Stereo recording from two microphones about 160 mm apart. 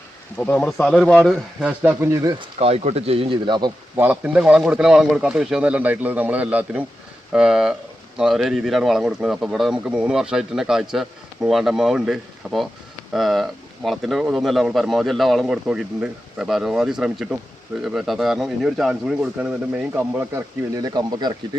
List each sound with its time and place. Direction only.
0.3 s speech: 5° left (ahead or behind)
1.6 s speech: 10° right (ahead or behind)
2.4 s speech: 40° right (ahead or behind)
3.9 s speech: 10° right (ahead or behind)